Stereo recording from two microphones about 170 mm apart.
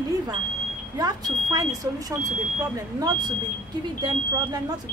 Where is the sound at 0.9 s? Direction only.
20° right (ahead or behind).